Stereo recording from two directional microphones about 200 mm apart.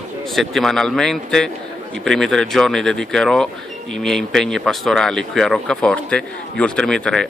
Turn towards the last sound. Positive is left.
turn(degrees=5)  # may be behind; listen again after turning